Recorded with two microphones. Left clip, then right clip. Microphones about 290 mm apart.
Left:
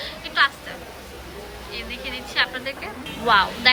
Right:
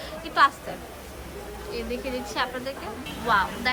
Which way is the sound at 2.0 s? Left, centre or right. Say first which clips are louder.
Left 7 dB; centre.